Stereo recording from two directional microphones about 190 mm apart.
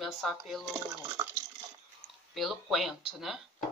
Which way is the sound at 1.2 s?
20° right (ahead or behind).